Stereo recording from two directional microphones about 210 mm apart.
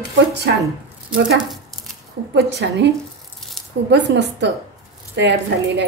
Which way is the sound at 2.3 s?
55° right (ahead or behind).